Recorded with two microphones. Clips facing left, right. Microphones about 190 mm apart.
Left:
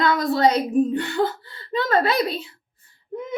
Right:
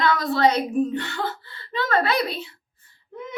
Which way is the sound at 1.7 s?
35° left (ahead or behind).